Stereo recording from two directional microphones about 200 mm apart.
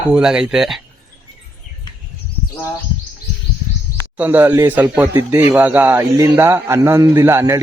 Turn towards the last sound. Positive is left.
turn(degrees=-15)  # may be behind; listen again after turning